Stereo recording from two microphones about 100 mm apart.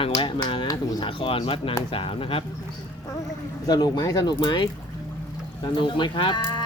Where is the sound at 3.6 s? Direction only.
40° left (ahead or behind).